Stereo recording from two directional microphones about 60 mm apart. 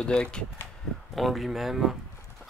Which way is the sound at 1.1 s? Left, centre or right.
Centre.